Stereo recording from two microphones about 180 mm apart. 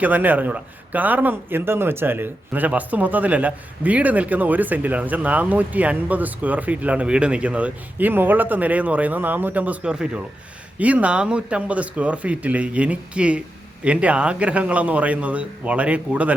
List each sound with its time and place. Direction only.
0.0 s a man's voice: 10° right (ahead or behind)